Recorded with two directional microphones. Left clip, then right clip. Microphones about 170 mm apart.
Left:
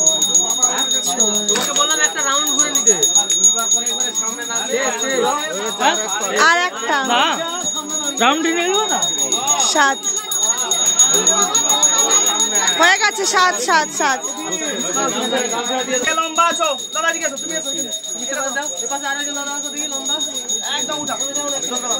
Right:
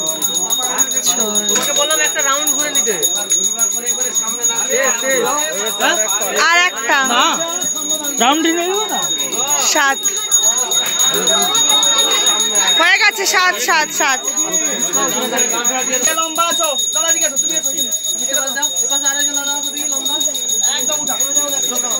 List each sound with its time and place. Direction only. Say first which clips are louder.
1.9 s a sound: right 2 dB; 90° left
6.3 s speech: right 1 dB; 15° left (ahead or behind)
7.1 s speech: right 2 dB; 50° right (ahead or behind)
9.6 s speech: right 1 dB; 10° left (ahead or behind)
12.7 s speech: right 2 dB; 15° left (ahead or behind)